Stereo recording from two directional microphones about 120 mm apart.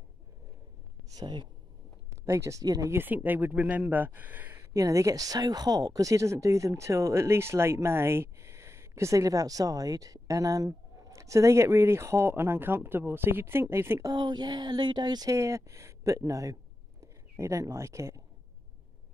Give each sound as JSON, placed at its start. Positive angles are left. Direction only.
{"t": 1.1, "sound": "speech", "side_deg": -40}
{"t": 2.0, "sound": "speech", "side_deg": -25}
{"t": 4.7, "sound": "a woman's voice", "side_deg": -25}
{"t": 14.1, "sound": "speech", "side_deg": -35}